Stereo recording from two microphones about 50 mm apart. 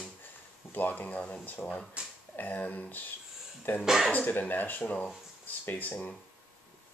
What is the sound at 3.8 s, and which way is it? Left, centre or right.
Speech, centre.